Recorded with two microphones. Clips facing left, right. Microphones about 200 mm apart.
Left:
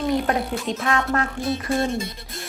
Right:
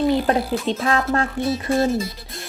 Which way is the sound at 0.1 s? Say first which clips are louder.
Right 3 dB; 30° right (ahead or behind).